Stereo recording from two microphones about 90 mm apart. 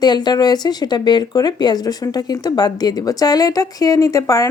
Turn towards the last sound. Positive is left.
turn(degrees=40)  # may be behind; listen again after turning